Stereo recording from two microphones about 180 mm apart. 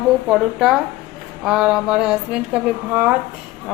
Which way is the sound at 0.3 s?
5° right (ahead or behind).